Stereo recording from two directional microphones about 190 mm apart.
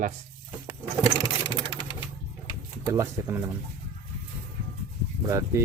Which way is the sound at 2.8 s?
10° right (ahead or behind).